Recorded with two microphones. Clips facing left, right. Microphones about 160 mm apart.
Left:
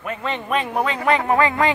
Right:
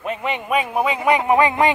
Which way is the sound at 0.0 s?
15° right (ahead or behind).